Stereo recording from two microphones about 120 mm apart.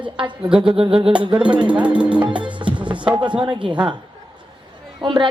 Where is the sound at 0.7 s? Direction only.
50° right (ahead or behind).